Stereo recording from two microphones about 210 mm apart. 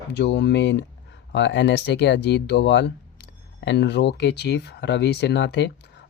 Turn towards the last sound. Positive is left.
turn(degrees=55)  # may be behind; listen again after turning